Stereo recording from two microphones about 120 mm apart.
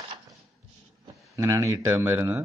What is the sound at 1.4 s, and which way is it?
Speech, 30° right (ahead or behind).